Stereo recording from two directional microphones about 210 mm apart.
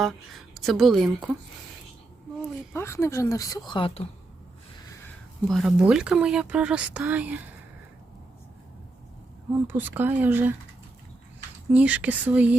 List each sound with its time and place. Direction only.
0.5 s speech: centre (ahead or behind)
2.7 s speech: 10° left (ahead or behind); by 4.1 s 25° left (ahead or behind)
5.5 s speech: centre (ahead or behind)
9.6 s speech: 10° right (ahead or behind)
11.7 s speech: 5° right (ahead or behind)